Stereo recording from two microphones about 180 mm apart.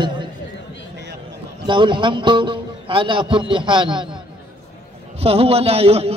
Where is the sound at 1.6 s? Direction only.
25° right (ahead or behind).